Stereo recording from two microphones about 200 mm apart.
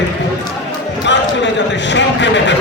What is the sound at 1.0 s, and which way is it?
A man's voice, 60° left (ahead or behind).